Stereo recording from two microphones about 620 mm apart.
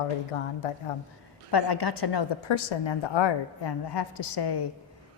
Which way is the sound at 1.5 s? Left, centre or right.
Left.